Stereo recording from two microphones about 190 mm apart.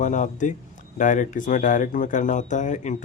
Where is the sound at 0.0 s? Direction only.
40° left (ahead or behind).